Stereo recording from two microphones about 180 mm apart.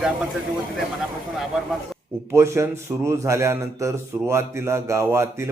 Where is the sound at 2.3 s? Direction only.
15° right (ahead or behind).